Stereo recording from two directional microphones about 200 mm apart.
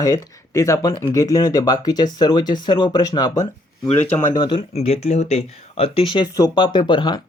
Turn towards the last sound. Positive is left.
turn(degrees=25)  # may be behind; listen again after turning